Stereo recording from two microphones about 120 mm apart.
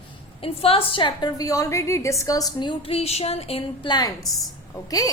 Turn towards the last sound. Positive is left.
turn(degrees=30)  # may be behind; listen again after turning